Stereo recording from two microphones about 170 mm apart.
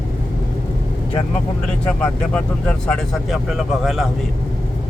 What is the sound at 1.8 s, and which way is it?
Speech, 10° left (ahead or behind).